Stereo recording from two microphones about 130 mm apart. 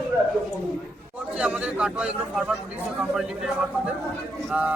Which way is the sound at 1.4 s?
10° right (ahead or behind).